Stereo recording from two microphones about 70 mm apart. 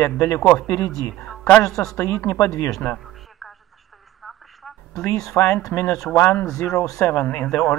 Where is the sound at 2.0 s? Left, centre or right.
Left.